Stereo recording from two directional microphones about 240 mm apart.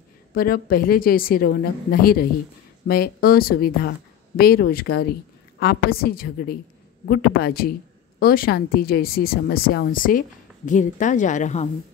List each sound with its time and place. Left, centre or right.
0.3 s a woman's voice: left